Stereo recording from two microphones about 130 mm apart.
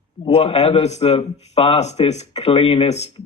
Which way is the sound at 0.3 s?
55° left (ahead or behind).